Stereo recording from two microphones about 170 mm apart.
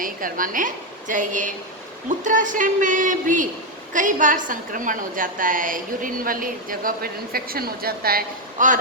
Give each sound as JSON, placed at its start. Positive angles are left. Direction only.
{"t": 0.0, "sound": "a woman's voice", "side_deg": -55}